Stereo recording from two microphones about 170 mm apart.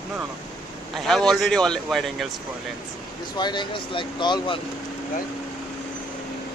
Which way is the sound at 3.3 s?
25° left (ahead or behind).